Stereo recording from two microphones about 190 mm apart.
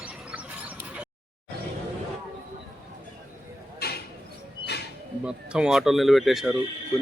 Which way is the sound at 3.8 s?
55° left (ahead or behind).